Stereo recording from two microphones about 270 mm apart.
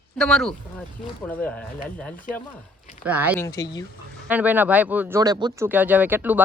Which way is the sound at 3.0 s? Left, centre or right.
Centre.